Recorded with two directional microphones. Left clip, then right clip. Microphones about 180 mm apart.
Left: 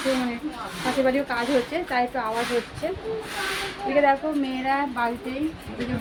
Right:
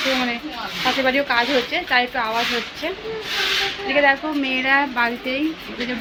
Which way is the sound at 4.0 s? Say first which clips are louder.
Right 3 dB; 5° left (ahead or behind).